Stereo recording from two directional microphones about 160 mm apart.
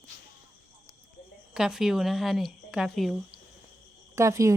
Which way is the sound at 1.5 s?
5° right (ahead or behind).